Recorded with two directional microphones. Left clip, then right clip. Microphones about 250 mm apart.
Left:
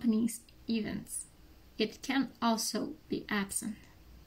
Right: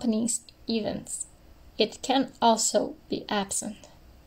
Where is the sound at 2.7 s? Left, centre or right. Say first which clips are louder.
Right 10 dB; centre.